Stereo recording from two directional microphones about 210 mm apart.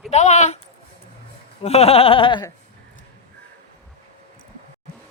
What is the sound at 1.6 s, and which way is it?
Bleat, 30° left (ahead or behind).